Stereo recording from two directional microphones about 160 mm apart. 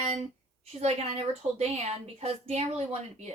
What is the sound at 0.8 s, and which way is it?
A woman's voice, 40° right (ahead or behind).